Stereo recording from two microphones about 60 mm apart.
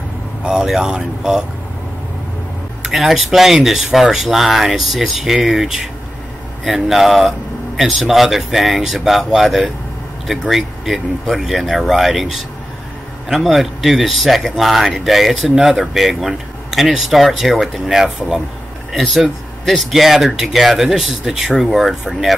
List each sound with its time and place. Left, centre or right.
0.4 s speech: centre
2.8 s speech: centre